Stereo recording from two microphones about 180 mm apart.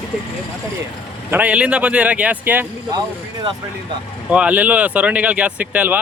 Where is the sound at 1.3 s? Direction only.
10° right (ahead or behind).